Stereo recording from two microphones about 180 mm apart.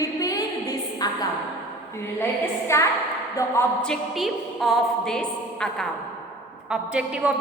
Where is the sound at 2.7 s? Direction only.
15° left (ahead or behind).